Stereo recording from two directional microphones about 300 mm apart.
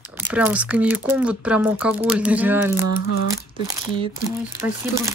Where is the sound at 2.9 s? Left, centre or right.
Left.